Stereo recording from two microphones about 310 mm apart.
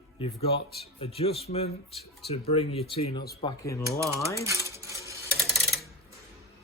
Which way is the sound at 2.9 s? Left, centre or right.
Centre.